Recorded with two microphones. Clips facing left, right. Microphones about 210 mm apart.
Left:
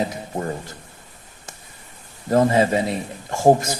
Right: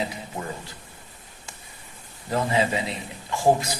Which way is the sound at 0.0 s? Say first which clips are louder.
Left 6 dB; 45° left (ahead or behind).